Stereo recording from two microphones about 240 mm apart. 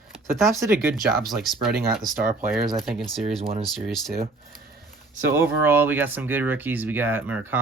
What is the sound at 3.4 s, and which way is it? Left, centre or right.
Speech, right.